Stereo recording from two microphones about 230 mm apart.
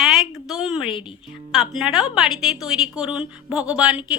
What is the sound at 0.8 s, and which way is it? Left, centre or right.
Speech, left.